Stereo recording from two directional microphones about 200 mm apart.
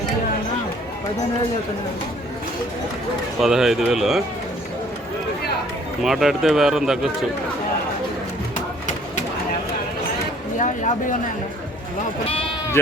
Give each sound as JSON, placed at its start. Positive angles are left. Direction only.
{"t": 3.4, "sound": "speech", "side_deg": 0}
{"t": 6.0, "sound": "speech", "side_deg": 0}
{"t": 10.6, "sound": "a sound", "side_deg": 40}